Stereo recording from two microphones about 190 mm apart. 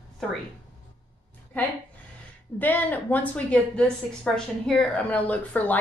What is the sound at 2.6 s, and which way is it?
A woman's voice, 10° left (ahead or behind).